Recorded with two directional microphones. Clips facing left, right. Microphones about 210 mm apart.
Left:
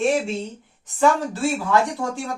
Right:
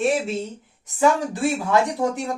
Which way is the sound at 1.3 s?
20° right (ahead or behind).